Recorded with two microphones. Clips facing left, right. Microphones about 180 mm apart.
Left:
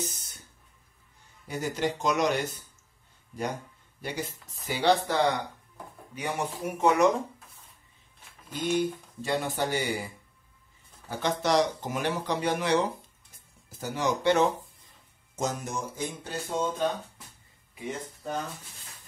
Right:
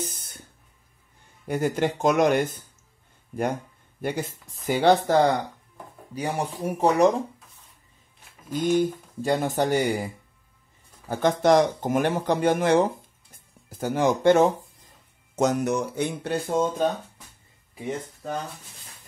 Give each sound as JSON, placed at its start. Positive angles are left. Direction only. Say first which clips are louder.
{"t": 0.0, "sound": "music", "louder": "right 2 dB", "side_deg": -55}
{"t": 1.5, "sound": "speech", "louder": "right 6 dB", "side_deg": -55}
{"t": 8.7, "sound": "speech", "louder": "right 5 dB", "side_deg": -45}
{"t": 15.3, "sound": "speech", "louder": "right 9 dB", "side_deg": -65}